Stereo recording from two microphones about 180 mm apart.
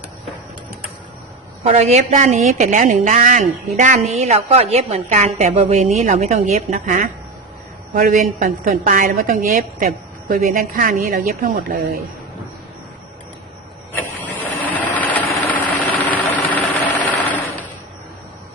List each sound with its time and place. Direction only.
1.6 s a woman's voice: 40° right (ahead or behind)
6.8 s a woman's voice: 55° right (ahead or behind)
13.9 s vehicle: 10° left (ahead or behind)
17.1 s a sound: 10° left (ahead or behind)